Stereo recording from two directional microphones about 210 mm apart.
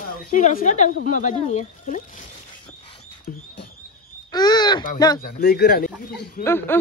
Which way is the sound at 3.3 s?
40° left (ahead or behind).